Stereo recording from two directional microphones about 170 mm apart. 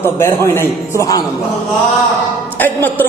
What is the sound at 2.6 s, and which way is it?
Speech, 10° left (ahead or behind).